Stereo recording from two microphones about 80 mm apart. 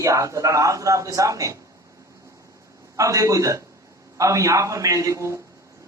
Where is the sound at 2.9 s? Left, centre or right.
Right.